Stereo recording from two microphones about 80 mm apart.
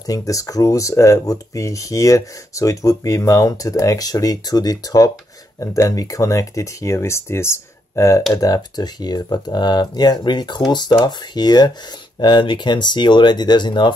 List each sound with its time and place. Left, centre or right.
0.0 s speech: left
12.2 s speech: left